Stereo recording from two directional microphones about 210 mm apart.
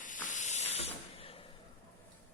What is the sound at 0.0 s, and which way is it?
Hiss, 40° left (ahead or behind).